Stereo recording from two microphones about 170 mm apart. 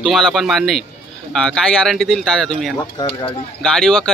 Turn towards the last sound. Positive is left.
turn(degrees=0)  # may be behind; listen again after turning